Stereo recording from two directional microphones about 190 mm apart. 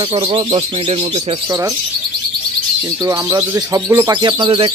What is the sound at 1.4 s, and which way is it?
Speech, 20° right (ahead or behind).